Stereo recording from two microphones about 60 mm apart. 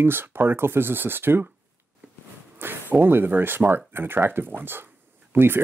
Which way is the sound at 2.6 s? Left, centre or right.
Right.